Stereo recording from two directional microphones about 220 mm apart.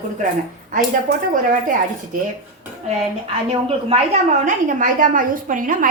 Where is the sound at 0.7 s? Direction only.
35° right (ahead or behind).